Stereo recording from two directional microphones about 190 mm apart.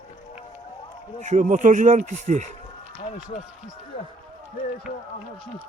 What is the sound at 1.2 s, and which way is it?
Speech, 40° right (ahead or behind).